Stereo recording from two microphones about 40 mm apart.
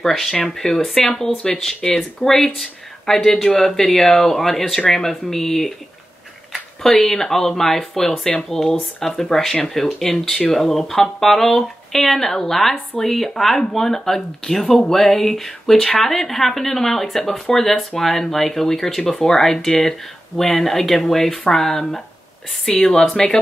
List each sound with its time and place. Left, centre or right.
0.0 s speech: centre
6.8 s speech: centre
22.8 s speech: left
23.1 s speech: centre